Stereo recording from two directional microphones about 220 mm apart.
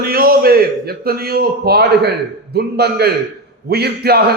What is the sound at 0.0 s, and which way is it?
A man's voice, 40° right (ahead or behind).